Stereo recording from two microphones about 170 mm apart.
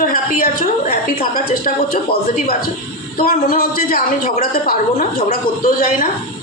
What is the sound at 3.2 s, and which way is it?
A woman's voice, 60° left (ahead or behind).